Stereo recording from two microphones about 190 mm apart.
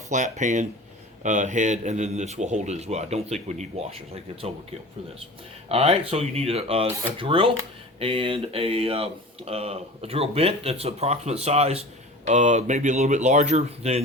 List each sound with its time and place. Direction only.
0.1 s speech: 40° right (ahead or behind)
5.6 s speech: 30° right (ahead or behind)